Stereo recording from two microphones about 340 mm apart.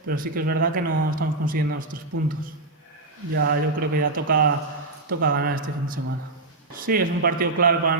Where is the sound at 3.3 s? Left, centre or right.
Right.